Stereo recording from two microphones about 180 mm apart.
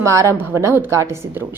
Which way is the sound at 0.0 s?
15° right (ahead or behind).